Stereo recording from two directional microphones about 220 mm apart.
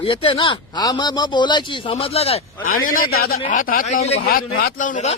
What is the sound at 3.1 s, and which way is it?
A man's voice, 45° left (ahead or behind).